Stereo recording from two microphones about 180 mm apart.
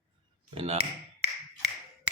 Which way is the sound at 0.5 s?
35° right (ahead or behind).